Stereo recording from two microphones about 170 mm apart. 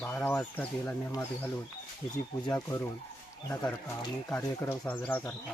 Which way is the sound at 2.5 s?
20° left (ahead or behind).